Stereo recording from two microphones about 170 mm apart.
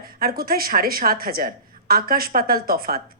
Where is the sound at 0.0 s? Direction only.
60° right (ahead or behind).